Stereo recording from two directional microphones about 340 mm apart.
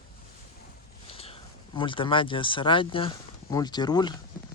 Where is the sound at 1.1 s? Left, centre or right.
Centre.